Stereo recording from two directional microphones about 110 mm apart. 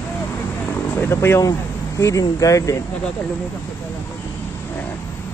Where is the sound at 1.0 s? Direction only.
25° left (ahead or behind).